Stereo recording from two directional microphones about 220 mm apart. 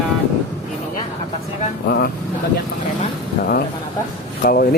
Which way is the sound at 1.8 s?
45° left (ahead or behind).